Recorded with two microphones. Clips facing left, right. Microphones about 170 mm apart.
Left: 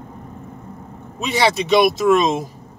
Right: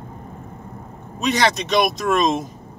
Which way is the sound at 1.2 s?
5° left (ahead or behind).